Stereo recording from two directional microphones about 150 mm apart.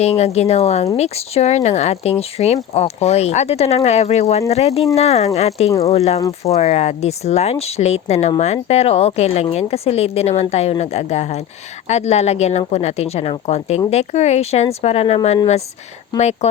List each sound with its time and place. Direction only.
0.0 s speech: 45° left (ahead or behind)